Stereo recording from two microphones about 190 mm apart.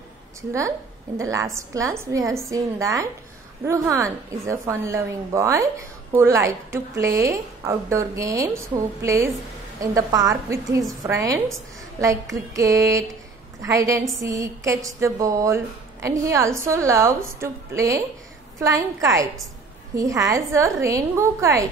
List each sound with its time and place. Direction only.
0.5 s a woman's voice: 15° right (ahead or behind)
12.5 s a woman's voice: 15° right (ahead or behind)